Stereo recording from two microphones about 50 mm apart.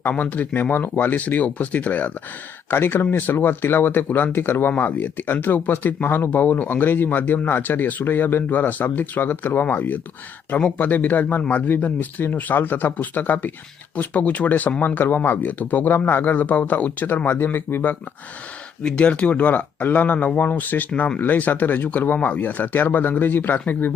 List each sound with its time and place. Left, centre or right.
0.2 s speech: left
2.6 s speech: left
4.8 s speech: left
17.2 s speech: left
18.8 s speech: left